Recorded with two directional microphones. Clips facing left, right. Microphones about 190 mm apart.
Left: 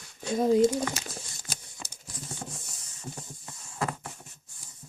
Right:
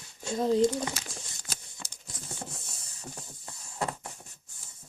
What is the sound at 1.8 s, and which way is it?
Typing, 20° left (ahead or behind).